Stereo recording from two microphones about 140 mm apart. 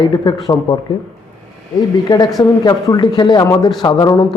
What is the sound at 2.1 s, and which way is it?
Speech, 30° left (ahead or behind).